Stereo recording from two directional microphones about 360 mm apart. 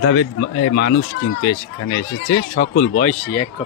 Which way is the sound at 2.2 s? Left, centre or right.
Left.